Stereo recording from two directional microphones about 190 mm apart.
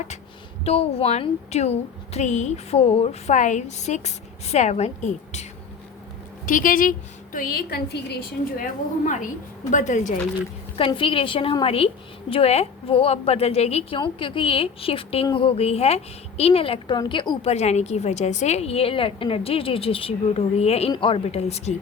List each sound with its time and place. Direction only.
0.6 s a woman's voice: 35° left (ahead or behind); by 8.6 s 60° left (ahead or behind)
9.0 s a woman's voice: 40° left (ahead or behind)
10.8 s a woman's voice: 30° left (ahead or behind)